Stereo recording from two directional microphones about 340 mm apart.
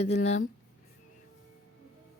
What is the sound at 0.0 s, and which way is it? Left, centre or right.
Speech, centre.